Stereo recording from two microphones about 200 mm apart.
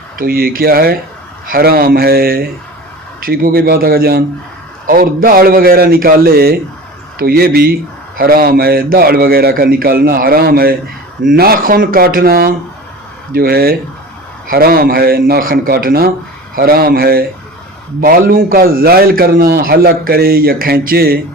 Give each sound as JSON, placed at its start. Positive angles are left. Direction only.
{"t": 0.2, "sound": "a man's voice", "side_deg": -50}